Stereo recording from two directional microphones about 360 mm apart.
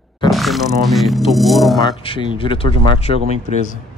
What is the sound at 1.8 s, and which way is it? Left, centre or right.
Speech, centre.